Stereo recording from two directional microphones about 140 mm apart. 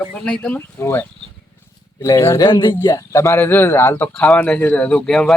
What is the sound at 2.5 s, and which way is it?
Speech, 35° left (ahead or behind).